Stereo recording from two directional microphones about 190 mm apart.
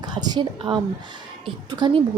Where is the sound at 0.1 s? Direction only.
20° right (ahead or behind).